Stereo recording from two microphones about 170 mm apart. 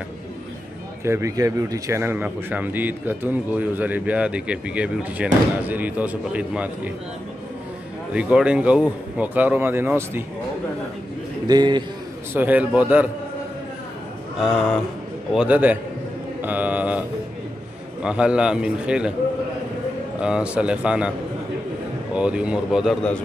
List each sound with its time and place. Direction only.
1.0 s a man's voice: 15° right (ahead or behind)
8.1 s a man's voice: 5° right (ahead or behind)
11.4 s a man's voice: 25° right (ahead or behind)
12.4 s a man's voice: 10° right (ahead or behind)
15.3 s a man's voice: 10° right (ahead or behind)
16.3 s mantra: 10° right (ahead or behind)
18.0 s a man's voice: 5° right (ahead or behind)
20.2 s a man's voice: 5° right (ahead or behind)
22.1 s a man's voice: 5° right (ahead or behind)